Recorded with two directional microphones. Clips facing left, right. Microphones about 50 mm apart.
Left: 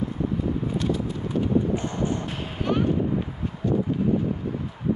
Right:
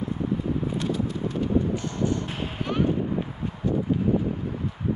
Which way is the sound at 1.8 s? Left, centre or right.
Left.